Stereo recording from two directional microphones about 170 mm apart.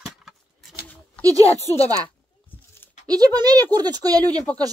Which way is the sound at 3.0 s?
25° right (ahead or behind).